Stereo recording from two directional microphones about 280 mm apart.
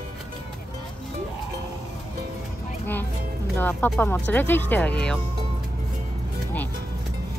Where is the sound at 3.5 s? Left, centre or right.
Centre.